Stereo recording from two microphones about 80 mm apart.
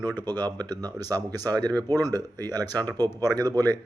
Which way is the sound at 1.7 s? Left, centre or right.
Right.